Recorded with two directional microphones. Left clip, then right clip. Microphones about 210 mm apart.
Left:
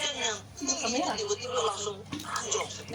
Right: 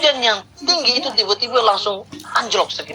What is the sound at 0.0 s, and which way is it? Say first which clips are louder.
Speech: right 16 dB; 40° right (ahead or behind).